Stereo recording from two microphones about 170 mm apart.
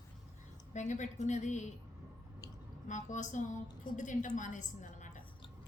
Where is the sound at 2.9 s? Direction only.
45° left (ahead or behind).